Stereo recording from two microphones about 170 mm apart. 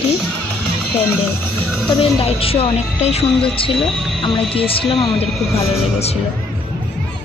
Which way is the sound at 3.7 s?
Centre (ahead or behind).